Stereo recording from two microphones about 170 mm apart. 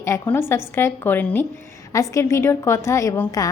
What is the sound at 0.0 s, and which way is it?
A woman's voice, 15° left (ahead or behind).